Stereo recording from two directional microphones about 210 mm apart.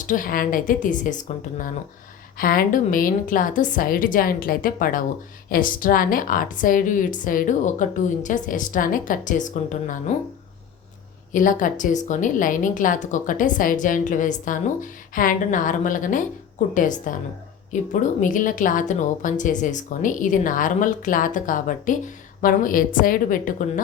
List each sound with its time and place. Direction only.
0.0 s a woman's voice: 40° left (ahead or behind)
11.3 s a woman's voice: 40° left (ahead or behind)